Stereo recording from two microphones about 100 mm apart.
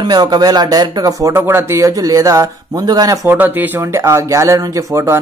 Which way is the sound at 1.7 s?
35° right (ahead or behind).